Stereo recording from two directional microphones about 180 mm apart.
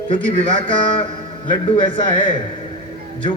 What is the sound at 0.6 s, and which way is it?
A man's voice, 30° left (ahead or behind).